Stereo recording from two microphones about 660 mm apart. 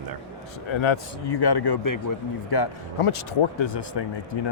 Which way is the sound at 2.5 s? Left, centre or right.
Left.